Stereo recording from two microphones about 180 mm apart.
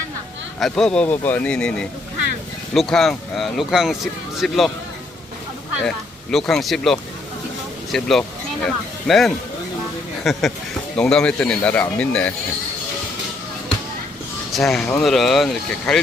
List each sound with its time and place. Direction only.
0.6 s speech: 5° left (ahead or behind)
6.3 s speech: centre (ahead or behind)
14.5 s speech: centre (ahead or behind)